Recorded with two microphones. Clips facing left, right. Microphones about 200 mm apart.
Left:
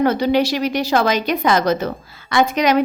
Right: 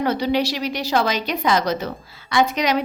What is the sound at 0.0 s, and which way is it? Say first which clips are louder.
A woman's voice: left 4 dB; 50° left (ahead or behind).